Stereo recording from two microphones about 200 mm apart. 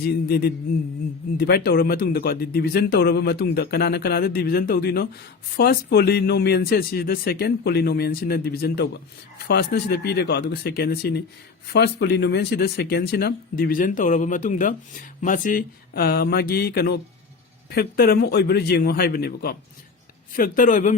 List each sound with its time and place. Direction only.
0.0 s speech: 50° left (ahead or behind)